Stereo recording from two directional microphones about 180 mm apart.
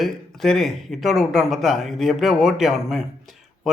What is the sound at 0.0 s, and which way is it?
Speech, centre (ahead or behind).